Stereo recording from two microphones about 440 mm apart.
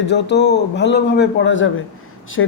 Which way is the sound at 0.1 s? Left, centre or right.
Left.